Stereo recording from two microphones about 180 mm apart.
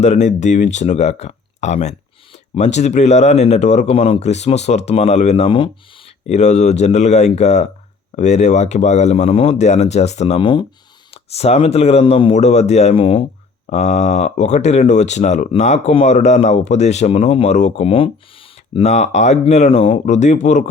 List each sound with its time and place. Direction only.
0.0 s speech: 40° left (ahead or behind)